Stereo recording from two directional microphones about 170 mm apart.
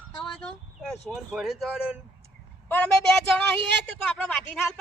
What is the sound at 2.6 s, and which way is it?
Speech, 10° left (ahead or behind).